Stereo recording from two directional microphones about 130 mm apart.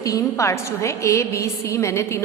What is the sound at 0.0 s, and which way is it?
A woman's voice, 25° left (ahead or behind).